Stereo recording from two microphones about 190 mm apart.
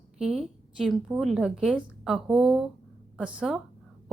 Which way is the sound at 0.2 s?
Centre (ahead or behind).